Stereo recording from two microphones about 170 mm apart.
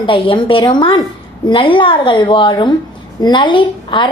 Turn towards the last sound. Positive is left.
turn(degrees=30)  # may be behind; listen again after turning